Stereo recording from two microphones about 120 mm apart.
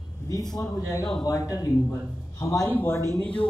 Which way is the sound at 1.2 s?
25° left (ahead or behind).